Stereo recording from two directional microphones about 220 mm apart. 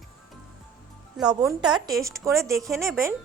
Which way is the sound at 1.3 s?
15° right (ahead or behind).